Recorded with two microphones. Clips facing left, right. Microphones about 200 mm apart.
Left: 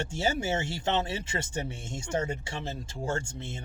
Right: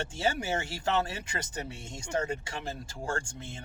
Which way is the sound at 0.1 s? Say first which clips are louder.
Left 1 dB; 25° left (ahead or behind).